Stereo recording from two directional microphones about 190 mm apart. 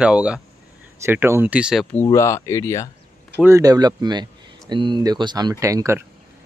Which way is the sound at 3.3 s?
15° right (ahead or behind).